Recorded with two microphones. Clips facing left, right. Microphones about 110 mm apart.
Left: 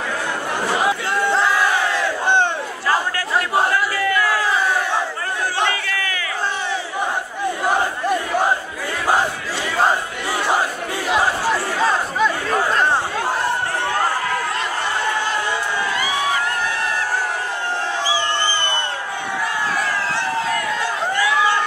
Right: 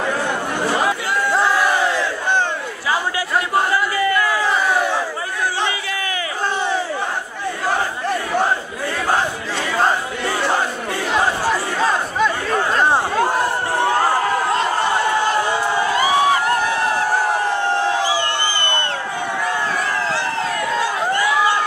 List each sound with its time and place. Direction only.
2.9 s crowd: 5° right (ahead or behind)
5.7 s crowd: 20° right (ahead or behind)
7.6 s crowd: 15° left (ahead or behind)
11.1 s chatter: 5° left (ahead or behind)
15.9 s a sound: 30° right (ahead or behind)